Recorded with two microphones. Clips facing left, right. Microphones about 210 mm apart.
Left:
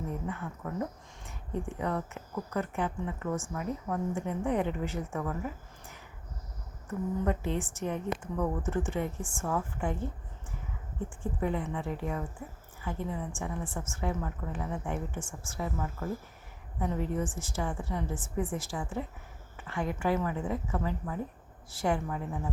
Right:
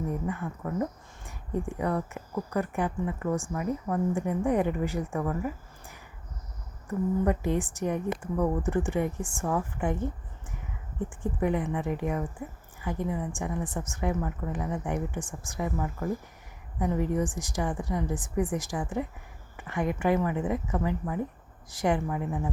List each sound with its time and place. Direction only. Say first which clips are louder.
0.1 s a woman's voice: right 4 dB; 10° right (ahead or behind)
0.7 s speech: right 4 dB; centre (ahead or behind)
1.5 s a woman's voice: right 4 dB; 10° right (ahead or behind)
7.3 s a woman's voice: right 4 dB; 10° right (ahead or behind)
11.2 s a woman's voice: right 4 dB; 15° right (ahead or behind)